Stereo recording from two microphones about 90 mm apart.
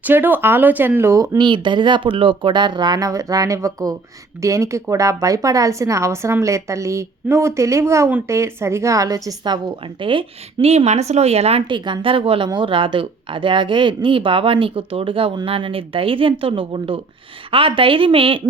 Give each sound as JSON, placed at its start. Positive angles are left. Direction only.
{"t": 0.0, "sound": "speech", "side_deg": -20}
{"t": 1.4, "sound": "speech", "side_deg": -60}
{"t": 10.0, "sound": "speech", "side_deg": -70}
{"t": 12.5, "sound": "speech", "side_deg": -65}